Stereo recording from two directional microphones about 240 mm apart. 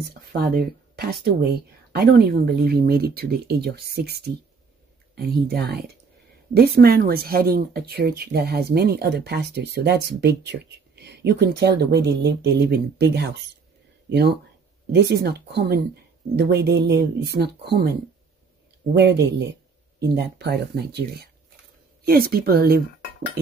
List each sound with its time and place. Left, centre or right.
0.3 s a sound: right
1.2 s a woman's voice: right
6.8 s a woman's voice: right
18.9 s a woman's voice: right